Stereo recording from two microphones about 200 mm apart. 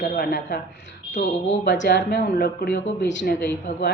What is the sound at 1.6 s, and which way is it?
A man's voice, 60° left (ahead or behind).